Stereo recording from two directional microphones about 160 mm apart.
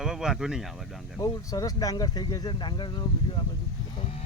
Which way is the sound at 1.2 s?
25° left (ahead or behind).